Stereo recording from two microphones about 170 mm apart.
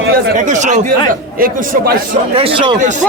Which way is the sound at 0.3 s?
45° right (ahead or behind).